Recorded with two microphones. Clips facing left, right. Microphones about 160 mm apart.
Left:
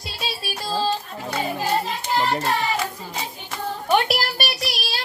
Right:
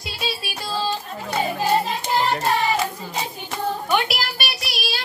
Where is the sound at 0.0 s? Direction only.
40° left (ahead or behind).